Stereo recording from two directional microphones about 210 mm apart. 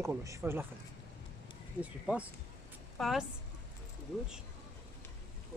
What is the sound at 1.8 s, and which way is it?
A woman's voice, 5° right (ahead or behind).